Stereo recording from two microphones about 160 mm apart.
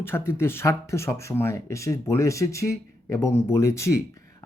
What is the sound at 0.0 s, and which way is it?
Speech, 15° left (ahead or behind).